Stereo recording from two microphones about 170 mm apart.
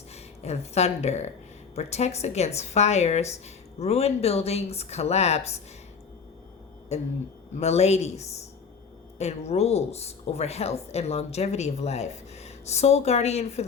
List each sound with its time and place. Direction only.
0.1 s speech: 40° left (ahead or behind)
6.9 s speech: 40° left (ahead or behind)
9.1 s speech: 40° left (ahead or behind)